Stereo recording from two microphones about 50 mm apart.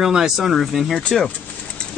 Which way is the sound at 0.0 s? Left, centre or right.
Centre.